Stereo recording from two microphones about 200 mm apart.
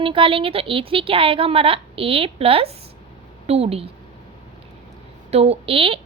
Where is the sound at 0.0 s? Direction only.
25° right (ahead or behind).